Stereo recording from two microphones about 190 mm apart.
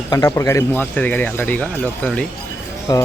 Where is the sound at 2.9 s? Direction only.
20° left (ahead or behind).